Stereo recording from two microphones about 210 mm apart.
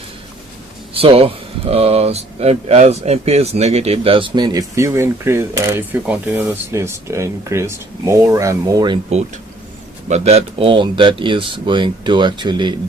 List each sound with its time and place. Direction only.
0.9 s speech: 25° right (ahead or behind)
9.0 s speech: 30° right (ahead or behind)